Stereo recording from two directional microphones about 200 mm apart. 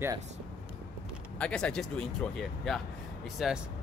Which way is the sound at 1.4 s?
5° left (ahead or behind).